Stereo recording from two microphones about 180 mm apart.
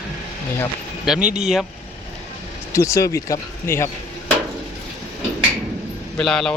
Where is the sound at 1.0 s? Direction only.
5° right (ahead or behind).